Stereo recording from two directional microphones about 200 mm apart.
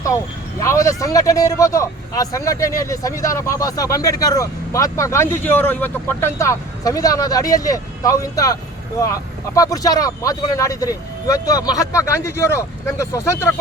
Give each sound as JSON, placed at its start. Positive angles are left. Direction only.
{"t": 0.6, "sound": "speech", "side_deg": 15}
{"t": 9.6, "sound": "speech", "side_deg": 15}